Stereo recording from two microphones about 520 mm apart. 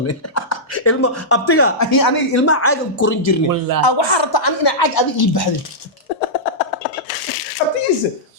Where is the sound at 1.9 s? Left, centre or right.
Left.